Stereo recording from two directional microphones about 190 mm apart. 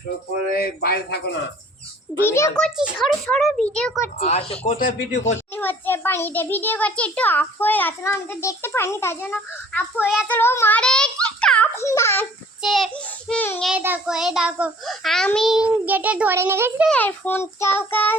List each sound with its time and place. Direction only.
0.5 s a man's voice: 55° left (ahead or behind)
2.2 s a child's voice: 15° left (ahead or behind)
2.6 s a child's voice: centre (ahead or behind)
4.2 s speech: 30° left (ahead or behind)
5.5 s a child's voice: 10° left (ahead or behind)
10.0 s a child's voice: 5° right (ahead or behind)
10.2 s a child's voice: 10° left (ahead or behind)
12.6 s a child's voice: centre (ahead or behind)
13.7 s a child's voice: 10° right (ahead or behind)
16.9 s a child's voice: 10° left (ahead or behind)